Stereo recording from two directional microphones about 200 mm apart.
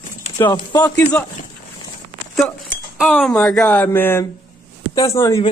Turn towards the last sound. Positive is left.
turn(degrees=15)  # may be behind; listen again after turning